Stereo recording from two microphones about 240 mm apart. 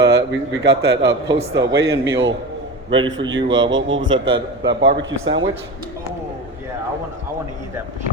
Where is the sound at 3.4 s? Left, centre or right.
Right.